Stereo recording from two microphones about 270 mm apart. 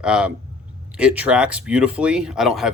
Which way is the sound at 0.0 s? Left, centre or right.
Centre.